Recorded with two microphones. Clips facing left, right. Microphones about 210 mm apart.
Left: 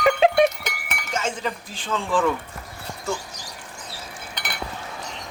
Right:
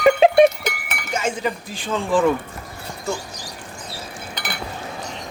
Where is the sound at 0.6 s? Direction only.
5° right (ahead or behind).